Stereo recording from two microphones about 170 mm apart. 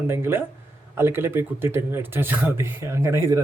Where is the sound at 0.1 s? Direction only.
15° right (ahead or behind).